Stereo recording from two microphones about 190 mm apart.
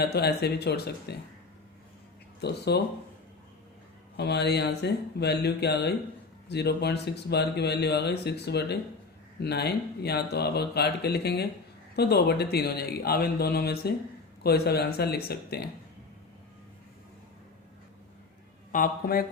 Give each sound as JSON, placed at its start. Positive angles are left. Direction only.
{"t": 0.0, "sound": "speech", "side_deg": 60}
{"t": 2.4, "sound": "speech", "side_deg": 60}
{"t": 4.2, "sound": "speech", "side_deg": 60}
{"t": 18.7, "sound": "a man's voice", "side_deg": 45}